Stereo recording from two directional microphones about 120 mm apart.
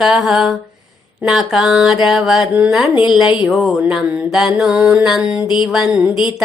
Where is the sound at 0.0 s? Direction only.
5° right (ahead or behind).